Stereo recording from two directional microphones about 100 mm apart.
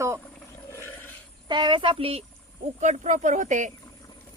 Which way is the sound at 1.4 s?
50° right (ahead or behind).